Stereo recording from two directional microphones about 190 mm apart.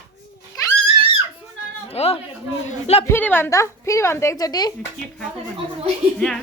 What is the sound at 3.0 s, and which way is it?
A woman's voice, 10° left (ahead or behind).